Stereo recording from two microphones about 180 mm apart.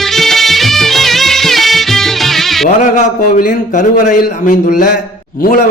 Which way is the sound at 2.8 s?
45° left (ahead or behind).